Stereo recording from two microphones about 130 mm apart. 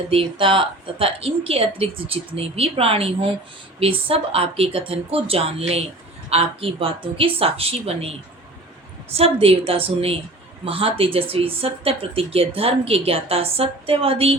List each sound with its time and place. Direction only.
0.1 s speech: 45° right (ahead or behind)